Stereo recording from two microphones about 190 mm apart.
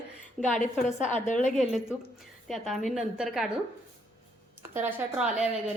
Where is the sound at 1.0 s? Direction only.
40° left (ahead or behind).